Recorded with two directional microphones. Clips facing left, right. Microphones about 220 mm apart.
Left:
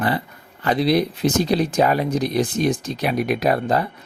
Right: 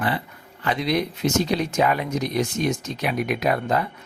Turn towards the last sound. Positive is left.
turn(degrees=35)  # may be behind; listen again after turning